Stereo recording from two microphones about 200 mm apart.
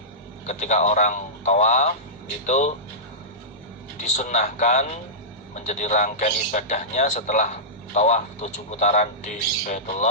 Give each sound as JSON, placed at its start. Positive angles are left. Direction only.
{"t": 0.4, "sound": "a man's voice", "side_deg": 35}
{"t": 4.2, "sound": "a man's voice", "side_deg": 35}